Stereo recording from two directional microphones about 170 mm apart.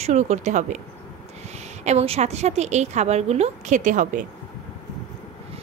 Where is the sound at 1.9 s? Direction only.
40° right (ahead or behind).